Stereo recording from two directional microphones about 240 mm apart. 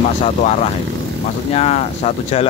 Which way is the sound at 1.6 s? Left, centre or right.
Left.